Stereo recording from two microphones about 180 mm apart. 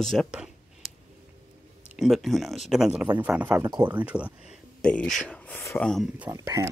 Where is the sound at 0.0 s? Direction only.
Centre (ahead or behind).